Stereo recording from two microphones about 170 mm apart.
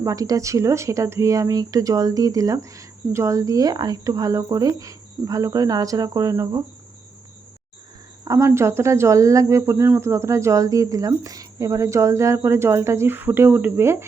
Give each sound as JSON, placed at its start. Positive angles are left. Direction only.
{"t": 0.0, "sound": "speech", "side_deg": -20}
{"t": 8.2, "sound": "speech", "side_deg": -20}